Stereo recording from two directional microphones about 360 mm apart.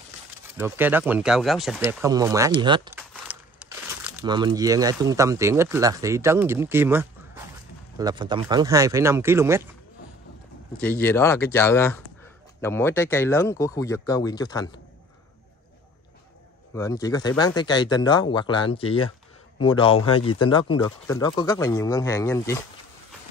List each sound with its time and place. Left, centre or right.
0.6 s speech: centre
10.8 s speech: centre
16.7 s speech: centre